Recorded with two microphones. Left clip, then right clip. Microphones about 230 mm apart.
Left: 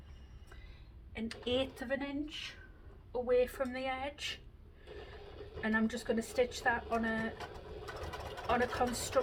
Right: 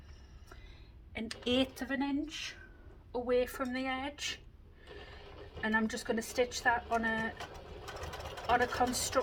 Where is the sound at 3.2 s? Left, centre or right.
Right.